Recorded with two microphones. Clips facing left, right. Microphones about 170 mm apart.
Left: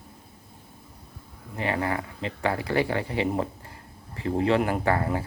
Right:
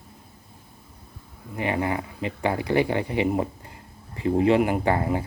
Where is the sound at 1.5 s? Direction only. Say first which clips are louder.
Right 2 dB; 15° right (ahead or behind).